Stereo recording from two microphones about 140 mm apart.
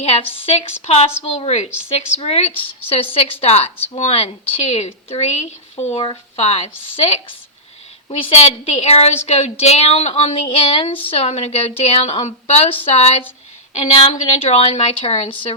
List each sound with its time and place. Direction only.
0.0 s a woman's voice: 45° left (ahead or behind)